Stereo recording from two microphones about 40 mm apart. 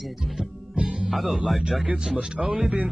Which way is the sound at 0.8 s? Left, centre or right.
Centre.